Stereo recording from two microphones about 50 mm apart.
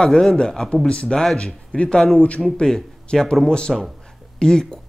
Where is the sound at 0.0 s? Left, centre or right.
Centre.